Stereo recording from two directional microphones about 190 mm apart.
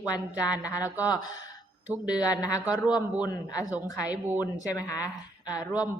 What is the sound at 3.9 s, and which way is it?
Speech, 10° right (ahead or behind).